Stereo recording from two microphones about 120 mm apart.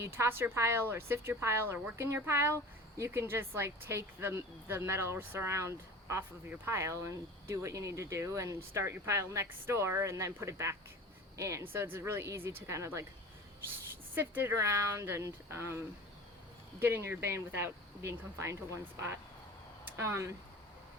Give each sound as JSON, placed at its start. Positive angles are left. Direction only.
{"t": 0.0, "sound": "speech", "side_deg": -20}
{"t": 14.2, "sound": "speech", "side_deg": -20}
{"t": 16.8, "sound": "speech", "side_deg": -20}
{"t": 20.0, "sound": "speech", "side_deg": -20}